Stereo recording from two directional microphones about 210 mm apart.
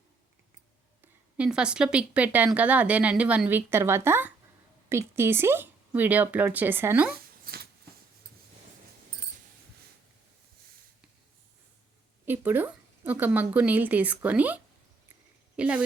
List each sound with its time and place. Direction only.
1.0 s a woman's voice: 5° right (ahead or behind)
7.4 s a sound: 45° right (ahead or behind)
12.2 s a woman's voice: 10° right (ahead or behind)